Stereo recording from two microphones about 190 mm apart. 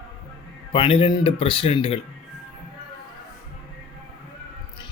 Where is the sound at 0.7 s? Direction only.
25° left (ahead or behind).